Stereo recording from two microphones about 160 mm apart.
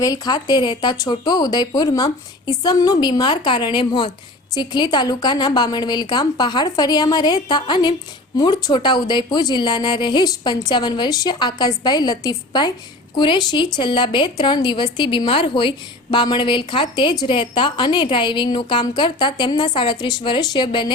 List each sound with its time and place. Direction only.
0.0 s a woman's voice: 20° left (ahead or behind)